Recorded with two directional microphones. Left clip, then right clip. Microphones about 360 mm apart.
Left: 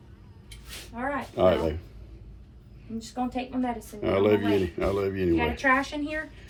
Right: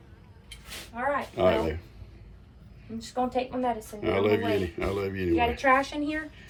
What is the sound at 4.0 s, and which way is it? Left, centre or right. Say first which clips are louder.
Speech: left 2 dB; centre.